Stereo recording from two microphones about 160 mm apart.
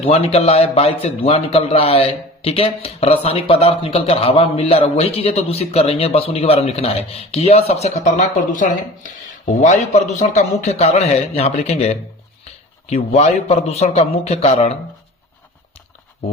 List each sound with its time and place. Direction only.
0.0 s a man's voice: 40° left (ahead or behind)